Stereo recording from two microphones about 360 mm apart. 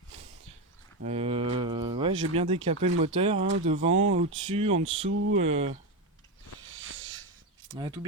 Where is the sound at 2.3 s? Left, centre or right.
Centre.